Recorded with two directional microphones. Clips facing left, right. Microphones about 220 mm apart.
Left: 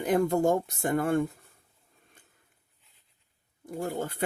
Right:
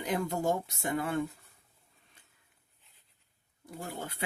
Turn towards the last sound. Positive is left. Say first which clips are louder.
# left 8 dB
turn(degrees=50)  # may be behind; listen again after turning